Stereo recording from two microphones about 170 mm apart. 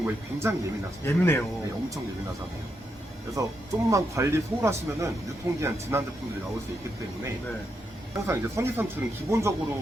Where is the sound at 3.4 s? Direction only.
20° right (ahead or behind).